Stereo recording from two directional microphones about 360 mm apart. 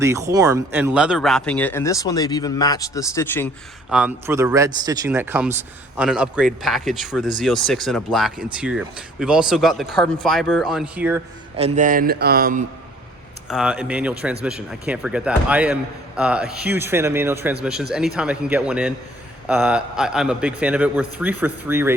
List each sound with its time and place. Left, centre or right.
0.0 s speech: centre
11.5 s speech: centre
13.5 s speech: centre